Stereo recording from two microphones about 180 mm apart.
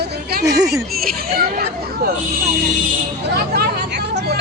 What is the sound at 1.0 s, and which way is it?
Speech, 55° right (ahead or behind).